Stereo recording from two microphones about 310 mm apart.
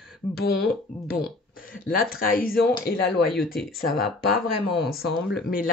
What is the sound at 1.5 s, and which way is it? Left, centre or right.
Speech, left.